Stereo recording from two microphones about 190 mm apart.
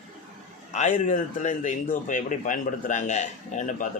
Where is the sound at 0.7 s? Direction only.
40° left (ahead or behind).